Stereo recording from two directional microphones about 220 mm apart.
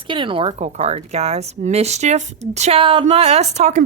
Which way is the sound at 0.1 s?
20° right (ahead or behind).